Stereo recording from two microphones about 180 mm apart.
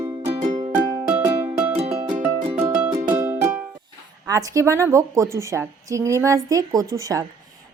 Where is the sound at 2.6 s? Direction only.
10° right (ahead or behind).